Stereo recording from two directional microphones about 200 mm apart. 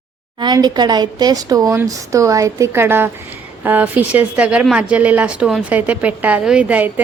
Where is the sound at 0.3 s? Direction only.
20° right (ahead or behind).